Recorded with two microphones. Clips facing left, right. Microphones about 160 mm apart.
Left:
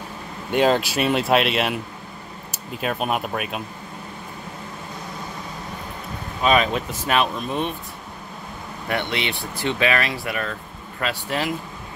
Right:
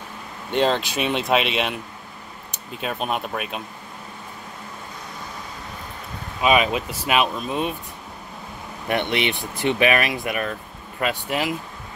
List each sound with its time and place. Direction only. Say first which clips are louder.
0.5 s speech: left 2 dB; 5° left (ahead or behind)
6.4 s speech: even; 5° right (ahead or behind)
8.8 s speech: right 3 dB; 20° right (ahead or behind)